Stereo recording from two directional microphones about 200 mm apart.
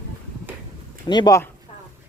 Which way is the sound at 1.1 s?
20° left (ahead or behind).